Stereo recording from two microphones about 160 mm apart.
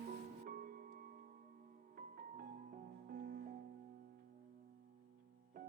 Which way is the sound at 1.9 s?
60° right (ahead or behind).